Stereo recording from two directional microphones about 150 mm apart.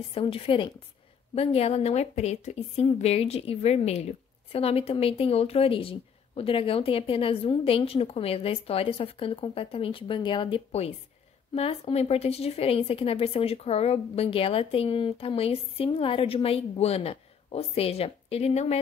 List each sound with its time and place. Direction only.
0.1 s a woman's voice: 40° left (ahead or behind)